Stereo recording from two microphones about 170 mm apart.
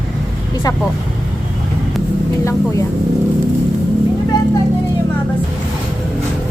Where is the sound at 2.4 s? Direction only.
15° left (ahead or behind).